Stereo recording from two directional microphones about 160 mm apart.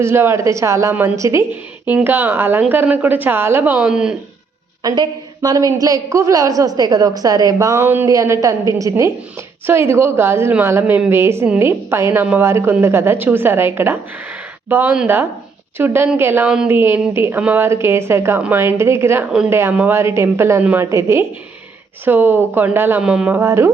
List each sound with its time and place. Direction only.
0.0 s a woman's voice: 15° right (ahead or behind)
4.8 s a woman's voice: 25° right (ahead or behind)